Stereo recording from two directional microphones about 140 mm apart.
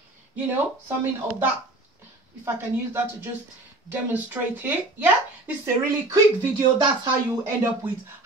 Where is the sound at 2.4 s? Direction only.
15° right (ahead or behind).